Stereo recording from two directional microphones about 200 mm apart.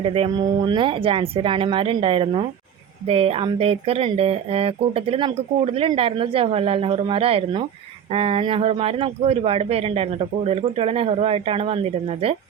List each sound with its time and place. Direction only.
0.0 s speech: 25° right (ahead or behind)